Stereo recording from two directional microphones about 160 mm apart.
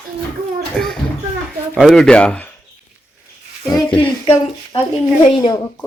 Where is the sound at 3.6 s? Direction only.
30° left (ahead or behind).